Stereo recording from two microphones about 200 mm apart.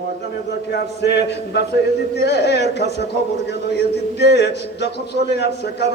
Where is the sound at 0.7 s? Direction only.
55° left (ahead or behind).